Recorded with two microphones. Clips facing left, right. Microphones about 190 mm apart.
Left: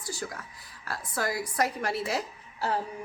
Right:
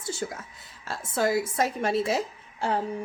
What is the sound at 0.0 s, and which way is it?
A woman's voice, 25° right (ahead or behind).